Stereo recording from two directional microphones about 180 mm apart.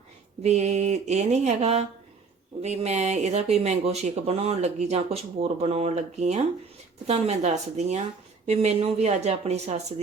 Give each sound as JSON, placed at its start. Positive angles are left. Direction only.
{"t": 0.4, "sound": "speech", "side_deg": -40}